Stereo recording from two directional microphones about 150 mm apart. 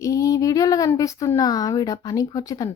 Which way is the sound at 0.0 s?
20° left (ahead or behind).